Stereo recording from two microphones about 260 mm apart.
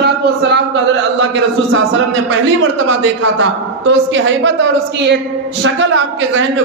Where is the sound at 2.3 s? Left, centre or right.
Right.